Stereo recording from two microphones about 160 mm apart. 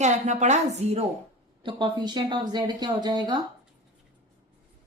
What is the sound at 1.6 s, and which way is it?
Speech, 30° right (ahead or behind).